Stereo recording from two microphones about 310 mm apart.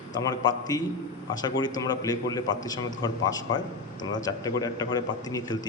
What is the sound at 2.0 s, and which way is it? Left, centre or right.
A man's voice, centre.